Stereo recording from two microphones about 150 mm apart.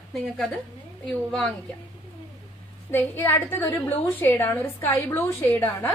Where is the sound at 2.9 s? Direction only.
15° left (ahead or behind).